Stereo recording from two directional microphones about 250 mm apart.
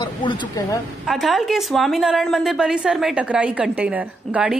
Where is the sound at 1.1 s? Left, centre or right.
Centre.